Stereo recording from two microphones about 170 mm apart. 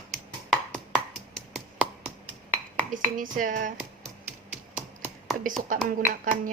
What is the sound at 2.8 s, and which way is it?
Speech, 50° right (ahead or behind).